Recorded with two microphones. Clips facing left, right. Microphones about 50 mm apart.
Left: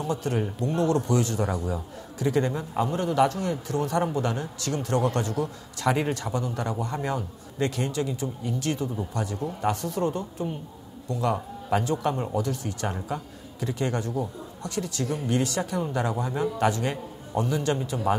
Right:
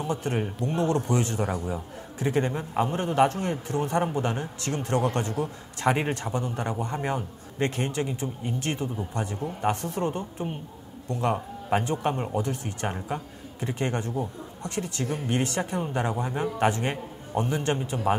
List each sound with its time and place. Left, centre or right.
0.0 s a man's voice: right